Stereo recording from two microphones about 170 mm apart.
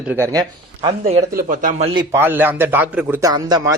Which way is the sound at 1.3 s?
50° right (ahead or behind).